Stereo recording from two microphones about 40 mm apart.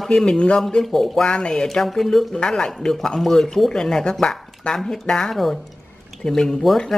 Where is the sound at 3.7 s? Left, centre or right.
Centre.